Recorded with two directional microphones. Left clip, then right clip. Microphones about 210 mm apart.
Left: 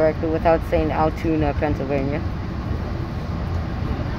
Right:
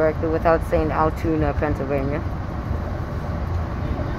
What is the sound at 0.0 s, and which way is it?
Speech, 20° left (ahead or behind).